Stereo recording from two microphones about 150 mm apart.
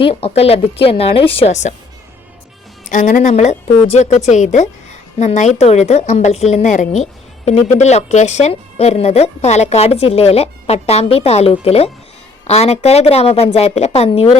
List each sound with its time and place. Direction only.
0.0 s a woman's voice: 40° left (ahead or behind)
2.9 s a woman's voice: 60° left (ahead or behind); by 14.3 s 40° left (ahead or behind)